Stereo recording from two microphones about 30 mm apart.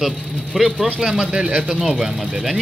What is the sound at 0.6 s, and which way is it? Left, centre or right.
Speech, centre.